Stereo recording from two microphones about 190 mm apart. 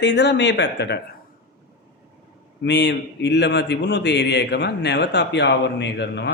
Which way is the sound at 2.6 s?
65° left (ahead or behind).